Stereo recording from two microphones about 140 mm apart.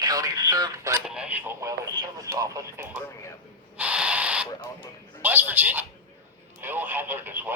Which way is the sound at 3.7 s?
10° right (ahead or behind).